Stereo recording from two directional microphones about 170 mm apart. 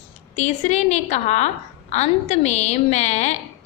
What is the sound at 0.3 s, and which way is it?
A woman's voice, 40° left (ahead or behind).